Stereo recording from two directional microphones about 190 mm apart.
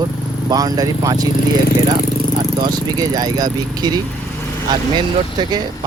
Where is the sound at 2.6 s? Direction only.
20° right (ahead or behind).